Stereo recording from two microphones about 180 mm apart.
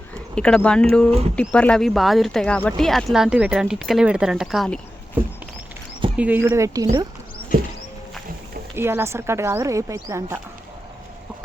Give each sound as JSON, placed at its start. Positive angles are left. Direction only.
{"t": 0.1, "sound": "speech", "side_deg": 5}
{"t": 6.1, "sound": "speech", "side_deg": -10}
{"t": 8.7, "sound": "speech", "side_deg": -15}